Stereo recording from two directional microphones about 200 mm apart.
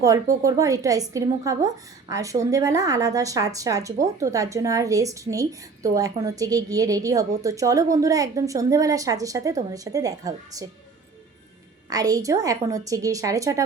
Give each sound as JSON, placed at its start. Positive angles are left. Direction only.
{"t": 0.0, "sound": "a woman's voice", "side_deg": -15}
{"t": 11.9, "sound": "a woman's voice", "side_deg": -20}